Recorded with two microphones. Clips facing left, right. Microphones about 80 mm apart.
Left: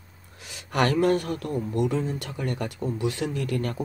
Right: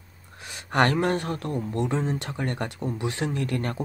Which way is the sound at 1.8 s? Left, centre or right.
Centre.